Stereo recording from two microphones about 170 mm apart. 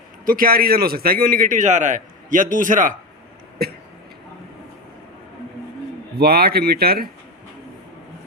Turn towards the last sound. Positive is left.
turn(degrees=-65)  # may be behind; listen again after turning